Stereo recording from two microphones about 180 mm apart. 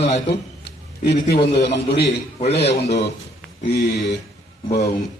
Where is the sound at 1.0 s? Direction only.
65° left (ahead or behind).